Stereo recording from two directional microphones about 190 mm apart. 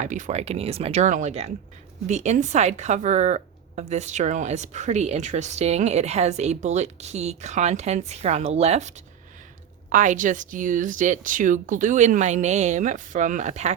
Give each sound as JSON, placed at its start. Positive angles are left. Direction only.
{"t": 0.0, "sound": "a woman's voice", "side_deg": -40}
{"t": 9.9, "sound": "speech", "side_deg": -40}